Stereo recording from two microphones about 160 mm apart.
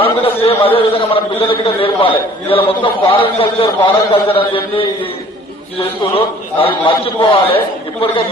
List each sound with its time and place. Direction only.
0.0 s a sound: 35° left (ahead or behind)
0.8 s a man's voice: 35° left (ahead or behind)
6.1 s a man's voice: 35° left (ahead or behind)